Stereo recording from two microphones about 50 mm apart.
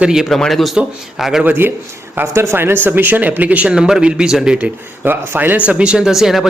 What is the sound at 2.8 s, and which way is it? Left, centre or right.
Speech, right.